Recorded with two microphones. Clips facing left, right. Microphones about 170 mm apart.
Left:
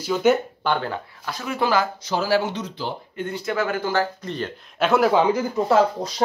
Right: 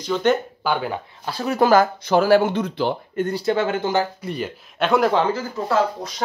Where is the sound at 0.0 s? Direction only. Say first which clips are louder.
Left 1 dB; 5° left (ahead or behind).